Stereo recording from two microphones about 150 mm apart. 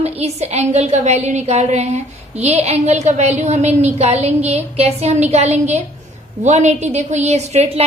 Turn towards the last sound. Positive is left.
turn(degrees=-45)  # may be behind; listen again after turning